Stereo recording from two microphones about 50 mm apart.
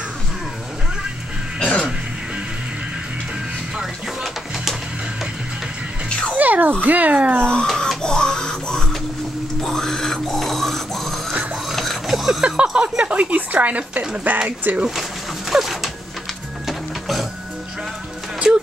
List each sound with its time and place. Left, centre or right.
1.6 s throat clearing: centre
6.3 s babbling: right
6.8 s speech: right
7.6 s a sound: centre
8.0 s printer: centre
9.6 s a sound: centre
12.4 s speech: centre; by 14.9 s right
15.5 s a sound: centre
16.6 s music: centre